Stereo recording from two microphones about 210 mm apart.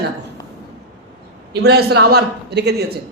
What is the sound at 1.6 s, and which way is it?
A man's voice, 50° right (ahead or behind).